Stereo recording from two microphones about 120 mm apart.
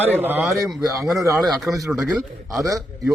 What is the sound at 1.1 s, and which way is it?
A man's voice, 25° right (ahead or behind).